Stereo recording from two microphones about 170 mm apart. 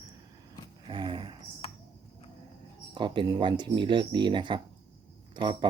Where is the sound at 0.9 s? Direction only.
30° right (ahead or behind).